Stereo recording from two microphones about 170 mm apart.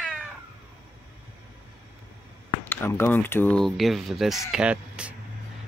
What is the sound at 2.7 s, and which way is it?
Speech, 15° left (ahead or behind).